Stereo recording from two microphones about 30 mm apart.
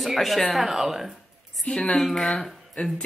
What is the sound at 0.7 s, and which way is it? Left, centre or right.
Speech, centre.